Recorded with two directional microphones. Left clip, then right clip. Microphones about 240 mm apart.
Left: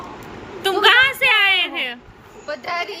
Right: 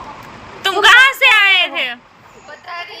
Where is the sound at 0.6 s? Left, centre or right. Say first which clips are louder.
Right 5 dB; centre.